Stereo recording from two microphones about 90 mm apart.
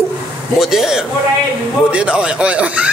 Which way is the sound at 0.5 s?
5° right (ahead or behind).